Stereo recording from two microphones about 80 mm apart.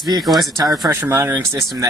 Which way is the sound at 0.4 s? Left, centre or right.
Right.